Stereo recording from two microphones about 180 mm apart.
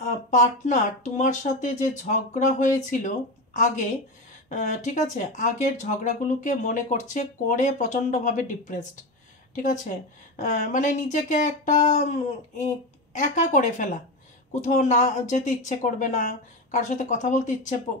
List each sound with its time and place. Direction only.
0.3 s speech: 45° left (ahead or behind)